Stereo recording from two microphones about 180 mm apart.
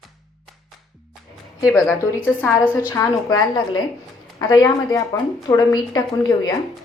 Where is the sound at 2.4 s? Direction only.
10° left (ahead or behind).